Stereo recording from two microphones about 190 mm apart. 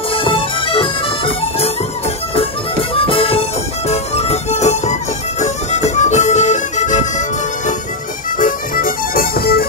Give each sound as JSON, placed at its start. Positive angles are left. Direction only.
{"t": 0.1, "sound": "music", "side_deg": 30}